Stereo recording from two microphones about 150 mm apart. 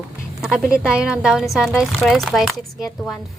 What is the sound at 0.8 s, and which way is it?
Speech, 5° right (ahead or behind).